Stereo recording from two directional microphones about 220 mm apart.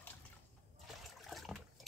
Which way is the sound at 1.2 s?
Centre (ahead or behind).